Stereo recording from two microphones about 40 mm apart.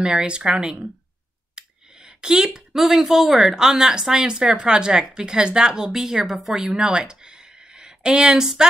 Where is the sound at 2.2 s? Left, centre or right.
Centre.